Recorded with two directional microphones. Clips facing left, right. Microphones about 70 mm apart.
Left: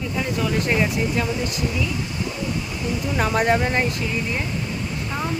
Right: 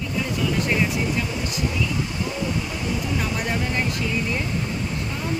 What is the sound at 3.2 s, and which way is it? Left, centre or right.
Speech, left.